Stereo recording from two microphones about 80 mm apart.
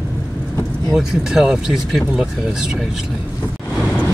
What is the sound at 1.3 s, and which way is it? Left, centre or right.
Speech, centre.